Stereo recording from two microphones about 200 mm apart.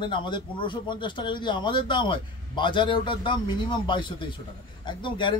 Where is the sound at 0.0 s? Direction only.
25° left (ahead or behind).